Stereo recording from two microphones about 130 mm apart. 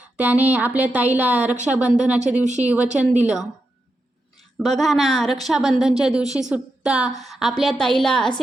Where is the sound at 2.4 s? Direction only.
65° right (ahead or behind).